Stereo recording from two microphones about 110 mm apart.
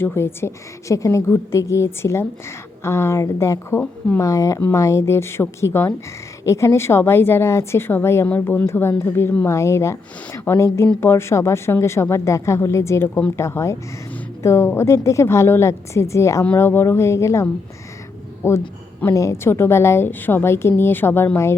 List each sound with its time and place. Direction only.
0.0 s a woman's voice: 20° left (ahead or behind)